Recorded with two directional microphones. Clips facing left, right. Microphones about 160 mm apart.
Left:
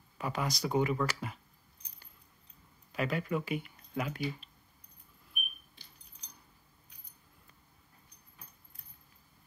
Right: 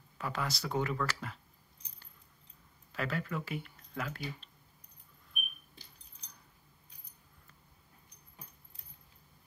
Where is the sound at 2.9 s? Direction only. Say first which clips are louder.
Left 4 dB; 15° left (ahead or behind).